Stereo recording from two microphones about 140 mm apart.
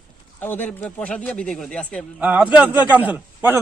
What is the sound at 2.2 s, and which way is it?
A man's voice, 10° right (ahead or behind).